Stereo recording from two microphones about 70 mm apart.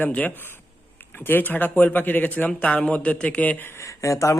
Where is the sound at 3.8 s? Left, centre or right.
Left.